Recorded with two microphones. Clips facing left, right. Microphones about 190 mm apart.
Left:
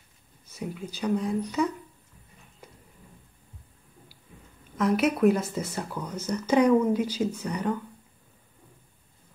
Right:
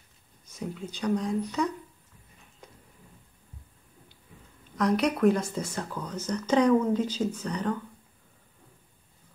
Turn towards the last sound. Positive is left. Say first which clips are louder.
# left 1 dB
turn(degrees=10)  # may be behind; listen again after turning